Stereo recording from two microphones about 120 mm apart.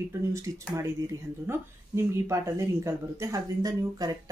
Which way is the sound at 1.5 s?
20° right (ahead or behind).